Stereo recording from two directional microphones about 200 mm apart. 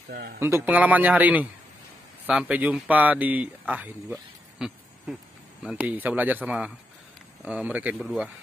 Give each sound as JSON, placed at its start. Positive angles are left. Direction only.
{"t": 0.1, "sound": "a man's voice", "side_deg": -55}
{"t": 0.4, "sound": "speech", "side_deg": -10}
{"t": 4.1, "sound": "a sound", "side_deg": -5}
{"t": 5.6, "sound": "speech", "side_deg": -5}